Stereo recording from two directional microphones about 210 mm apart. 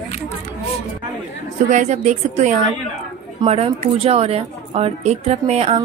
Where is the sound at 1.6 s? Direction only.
35° right (ahead or behind).